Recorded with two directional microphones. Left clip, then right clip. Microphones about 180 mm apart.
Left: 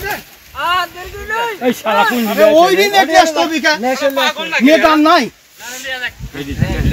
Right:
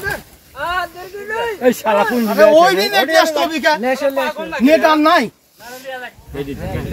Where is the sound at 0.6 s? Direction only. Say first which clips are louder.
Left 5 dB; 45° right (ahead or behind).